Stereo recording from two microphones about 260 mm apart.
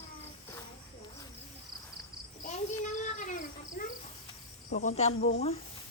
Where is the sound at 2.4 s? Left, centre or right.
Left.